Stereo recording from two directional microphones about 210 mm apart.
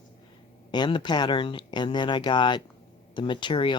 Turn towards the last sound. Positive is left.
turn(degrees=20)  # may be behind; listen again after turning